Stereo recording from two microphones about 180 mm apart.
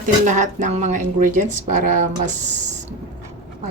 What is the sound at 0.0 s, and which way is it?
Speech, 45° right (ahead or behind).